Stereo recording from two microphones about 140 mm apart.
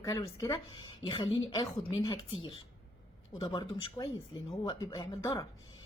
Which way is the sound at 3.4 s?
30° left (ahead or behind).